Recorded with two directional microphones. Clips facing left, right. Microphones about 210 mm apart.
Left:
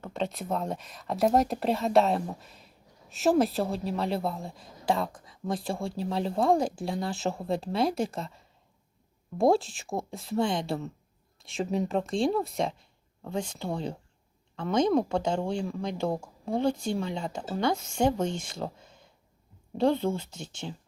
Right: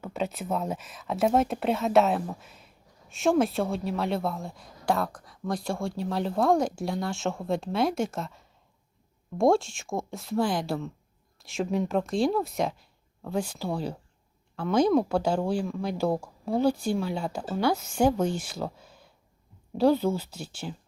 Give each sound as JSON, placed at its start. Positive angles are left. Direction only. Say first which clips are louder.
{"t": 0.0, "sound": "a woman's voice", "louder": "right 1 dB", "side_deg": -5}